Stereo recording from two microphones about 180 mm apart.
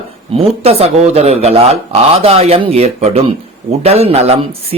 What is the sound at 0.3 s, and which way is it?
Speech, 35° right (ahead or behind).